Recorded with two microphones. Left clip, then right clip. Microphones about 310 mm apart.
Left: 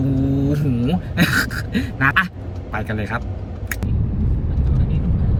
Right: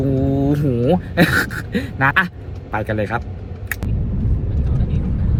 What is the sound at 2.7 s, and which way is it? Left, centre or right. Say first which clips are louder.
Speech: right 5 dB; right.